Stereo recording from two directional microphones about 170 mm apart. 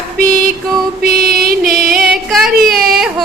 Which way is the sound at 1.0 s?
60° right (ahead or behind).